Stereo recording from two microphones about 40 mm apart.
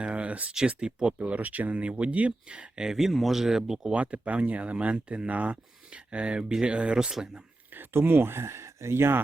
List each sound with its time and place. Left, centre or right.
0.0 s a sound: right
0.8 s speech: centre
1.2 s speech: right
2.8 s speech: centre
3.9 s speech: right
7.7 s speech: right